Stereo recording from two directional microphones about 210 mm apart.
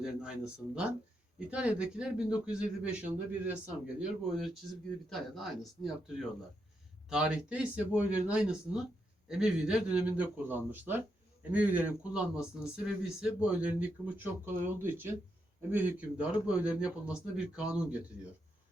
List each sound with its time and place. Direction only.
0.0 s a man's voice: 5° right (ahead or behind)
5.0 s a man's voice: centre (ahead or behind)